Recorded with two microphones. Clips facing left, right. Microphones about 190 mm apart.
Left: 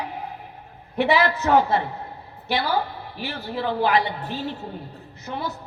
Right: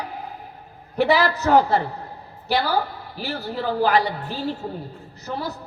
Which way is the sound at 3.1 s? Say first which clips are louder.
Right 3 dB; 40° right (ahead or behind).